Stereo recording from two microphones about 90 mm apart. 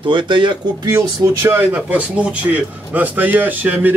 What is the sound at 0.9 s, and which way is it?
Speech, 30° right (ahead or behind).